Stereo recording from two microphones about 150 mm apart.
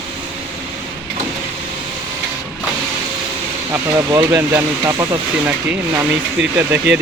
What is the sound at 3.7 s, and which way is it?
Speech, 15° right (ahead or behind).